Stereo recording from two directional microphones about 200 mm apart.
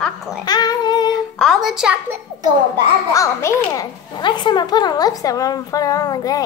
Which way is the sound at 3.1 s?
15° left (ahead or behind).